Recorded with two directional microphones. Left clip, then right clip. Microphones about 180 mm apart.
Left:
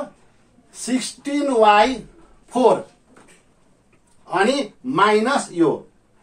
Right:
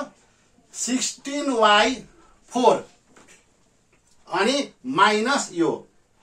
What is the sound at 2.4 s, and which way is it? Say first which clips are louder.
Speech: left 2 dB; 20° right (ahead or behind).